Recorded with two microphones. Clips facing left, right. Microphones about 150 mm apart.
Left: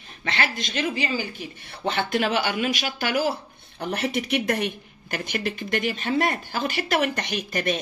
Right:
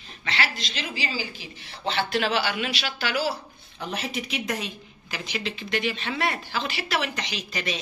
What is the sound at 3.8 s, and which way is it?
Speech, 65° left (ahead or behind).